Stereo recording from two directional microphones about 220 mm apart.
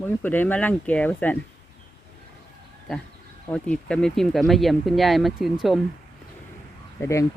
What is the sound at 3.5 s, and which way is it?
Speech, 5° left (ahead or behind).